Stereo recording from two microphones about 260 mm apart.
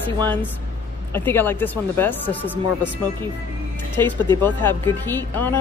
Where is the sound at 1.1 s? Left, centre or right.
Centre.